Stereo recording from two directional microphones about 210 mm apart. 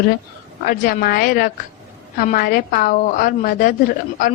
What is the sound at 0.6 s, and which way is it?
A woman's voice, 45° left (ahead or behind).